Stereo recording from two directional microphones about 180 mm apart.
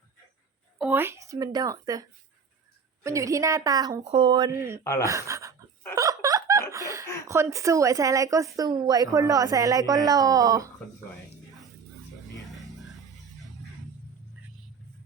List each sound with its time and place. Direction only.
0.8 s a woman's voice: 10° right (ahead or behind)
4.0 s speech: 30° right (ahead or behind); by 4.8 s 15° right (ahead or behind)
4.8 s speech: 15° left (ahead or behind)
5.0 s a sound: 15° right (ahead or behind)
5.9 s hiccup: 20° right (ahead or behind)
7.3 s speech: 15° right (ahead or behind)
12.5 s music: centre (ahead or behind)